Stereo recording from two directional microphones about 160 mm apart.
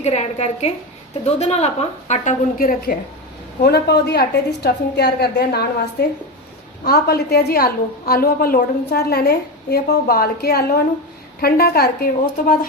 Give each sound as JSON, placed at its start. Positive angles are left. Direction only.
{"t": 0.0, "sound": "a woman's voice", "side_deg": 45}
{"t": 3.6, "sound": "a woman's voice", "side_deg": 90}
{"t": 6.8, "sound": "a woman's voice", "side_deg": 75}